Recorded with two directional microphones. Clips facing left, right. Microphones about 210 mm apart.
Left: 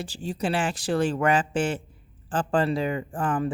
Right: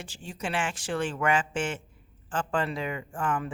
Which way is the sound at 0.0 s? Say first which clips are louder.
Left 7 dB; 35° left (ahead or behind).